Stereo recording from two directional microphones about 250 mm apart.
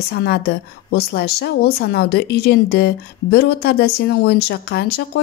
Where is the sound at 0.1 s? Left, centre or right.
Left.